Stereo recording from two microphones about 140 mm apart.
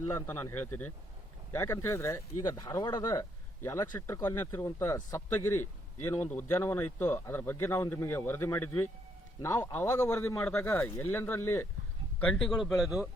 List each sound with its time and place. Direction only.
0.1 s a man's voice: 15° left (ahead or behind)
2.6 s a man's voice: 30° left (ahead or behind)
12.2 s speech: 5° left (ahead or behind)